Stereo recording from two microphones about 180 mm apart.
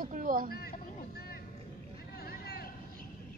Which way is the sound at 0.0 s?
45° right (ahead or behind).